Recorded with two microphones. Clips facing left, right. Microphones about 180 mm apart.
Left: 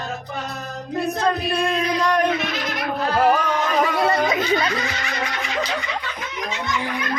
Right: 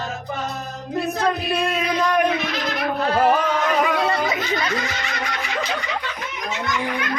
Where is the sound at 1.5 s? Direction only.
5° right (ahead or behind).